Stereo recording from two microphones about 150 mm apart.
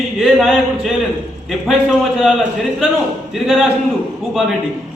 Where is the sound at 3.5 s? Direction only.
5° right (ahead or behind).